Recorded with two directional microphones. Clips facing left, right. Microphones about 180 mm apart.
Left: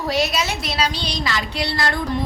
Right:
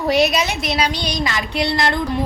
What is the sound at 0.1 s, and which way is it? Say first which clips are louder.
A woman's voice: right 5 dB; 15° right (ahead or behind).